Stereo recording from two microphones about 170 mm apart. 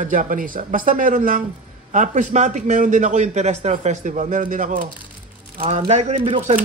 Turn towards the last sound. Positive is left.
turn(degrees=-35)  # may be behind; listen again after turning